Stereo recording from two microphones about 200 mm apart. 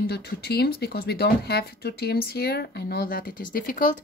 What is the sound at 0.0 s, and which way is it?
A woman's voice, 55° left (ahead or behind).